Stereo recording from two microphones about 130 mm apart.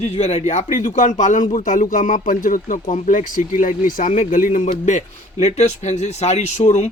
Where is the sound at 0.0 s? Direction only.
55° left (ahead or behind); by 4.7 s 90° left.